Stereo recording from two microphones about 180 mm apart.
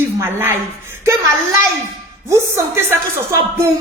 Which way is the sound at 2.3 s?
15° right (ahead or behind).